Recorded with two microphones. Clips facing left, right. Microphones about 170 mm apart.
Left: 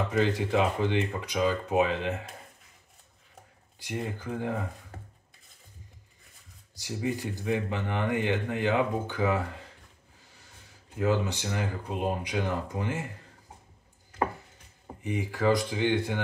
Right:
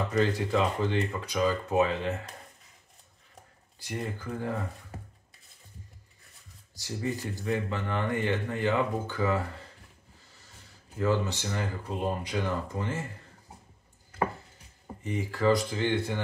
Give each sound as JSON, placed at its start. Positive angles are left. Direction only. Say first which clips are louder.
{"t": 0.2, "sound": "speech", "louder": "left 1 dB", "side_deg": 15}
{"t": 3.8, "sound": "speech", "louder": "left 1 dB", "side_deg": 20}
{"t": 6.8, "sound": "speech", "louder": "left 2 dB", "side_deg": 15}
{"t": 11.0, "sound": "speech", "louder": "left 1 dB", "side_deg": 15}
{"t": 15.0, "sound": "speech", "louder": "even", "side_deg": 15}